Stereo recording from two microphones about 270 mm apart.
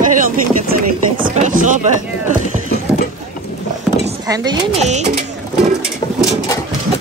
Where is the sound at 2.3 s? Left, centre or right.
Right.